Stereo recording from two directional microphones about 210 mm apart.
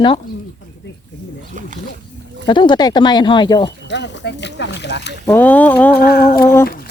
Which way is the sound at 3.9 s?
55° left (ahead or behind).